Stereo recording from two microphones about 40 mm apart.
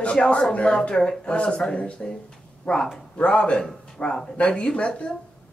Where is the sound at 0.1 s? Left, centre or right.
Left.